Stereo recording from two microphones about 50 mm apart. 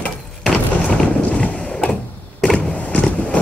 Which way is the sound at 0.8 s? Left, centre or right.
Left.